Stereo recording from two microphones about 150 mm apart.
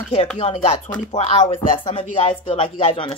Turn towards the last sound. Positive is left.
turn(degrees=40)  # may be behind; listen again after turning